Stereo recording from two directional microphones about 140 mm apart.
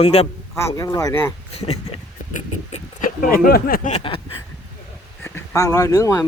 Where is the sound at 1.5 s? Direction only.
50° left (ahead or behind).